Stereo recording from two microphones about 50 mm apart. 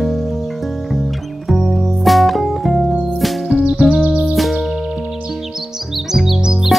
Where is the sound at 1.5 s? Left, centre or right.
Centre.